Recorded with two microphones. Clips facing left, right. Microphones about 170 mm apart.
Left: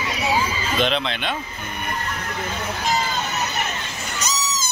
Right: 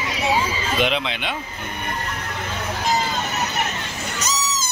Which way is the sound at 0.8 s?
10° right (ahead or behind).